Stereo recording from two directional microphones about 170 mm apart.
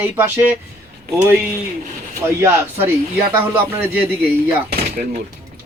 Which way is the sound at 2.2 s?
15° right (ahead or behind).